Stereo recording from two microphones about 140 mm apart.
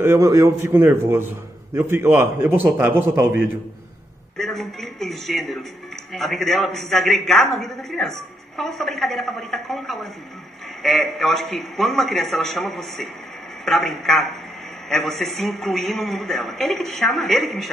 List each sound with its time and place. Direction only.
0.0 s a man's voice: 20° right (ahead or behind)
4.4 s a man's voice: centre (ahead or behind)